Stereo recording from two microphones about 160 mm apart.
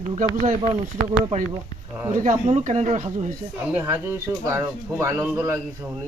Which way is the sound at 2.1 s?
50° right (ahead or behind).